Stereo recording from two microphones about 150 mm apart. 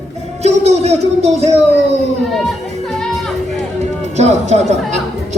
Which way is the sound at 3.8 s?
50° right (ahead or behind).